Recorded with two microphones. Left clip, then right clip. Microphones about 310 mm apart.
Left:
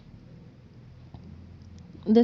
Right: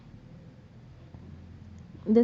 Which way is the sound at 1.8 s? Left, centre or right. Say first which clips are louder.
Left 2 dB; left.